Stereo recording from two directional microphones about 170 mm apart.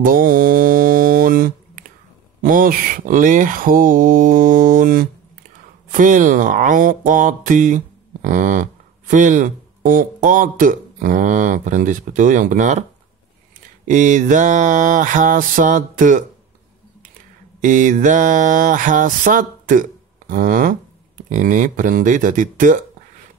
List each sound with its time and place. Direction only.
0.0 s mantra: 55° right (ahead or behind)
2.4 s speech: 55° right (ahead or behind)
13.8 s speech: 50° right (ahead or behind)
17.6 s mantra: 50° right (ahead or behind)
21.3 s speech: 50° right (ahead or behind)